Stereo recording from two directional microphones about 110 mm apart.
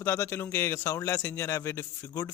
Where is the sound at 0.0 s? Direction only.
20° left (ahead or behind).